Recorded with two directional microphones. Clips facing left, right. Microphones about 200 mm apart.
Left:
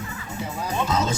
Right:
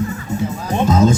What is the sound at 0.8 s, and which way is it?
Music, 50° right (ahead or behind).